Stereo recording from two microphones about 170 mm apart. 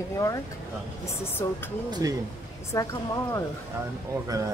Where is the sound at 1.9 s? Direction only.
20° right (ahead or behind).